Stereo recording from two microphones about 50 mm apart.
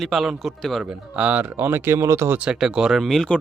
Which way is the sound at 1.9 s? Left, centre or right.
Right.